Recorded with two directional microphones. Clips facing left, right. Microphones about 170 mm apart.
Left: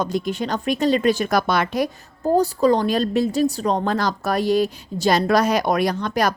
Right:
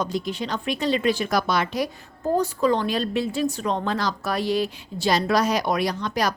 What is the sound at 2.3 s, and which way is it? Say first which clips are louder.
A woman's voice: left 4 dB; 35° left (ahead or behind).